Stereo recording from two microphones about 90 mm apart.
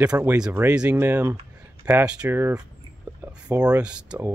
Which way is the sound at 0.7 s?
10° right (ahead or behind).